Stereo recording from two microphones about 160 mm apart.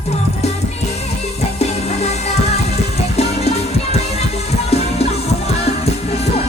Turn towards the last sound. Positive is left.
turn(degrees=40)  # may be behind; listen again after turning